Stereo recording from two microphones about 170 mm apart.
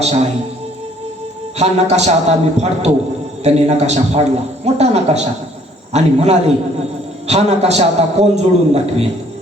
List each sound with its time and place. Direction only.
0.0 s a man's voice: 40° right (ahead or behind)
1.5 s a man's voice: 40° right (ahead or behind)